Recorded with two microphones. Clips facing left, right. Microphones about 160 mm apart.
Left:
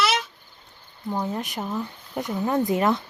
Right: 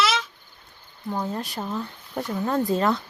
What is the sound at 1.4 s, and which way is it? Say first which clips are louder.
Speech: left 1 dB; 20° left (ahead or behind).